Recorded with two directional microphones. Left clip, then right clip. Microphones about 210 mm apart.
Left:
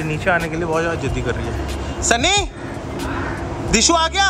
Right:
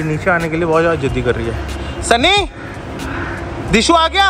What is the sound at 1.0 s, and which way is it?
Speech, 45° left (ahead or behind).